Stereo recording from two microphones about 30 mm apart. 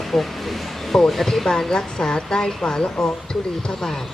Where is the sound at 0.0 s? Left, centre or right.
Centre.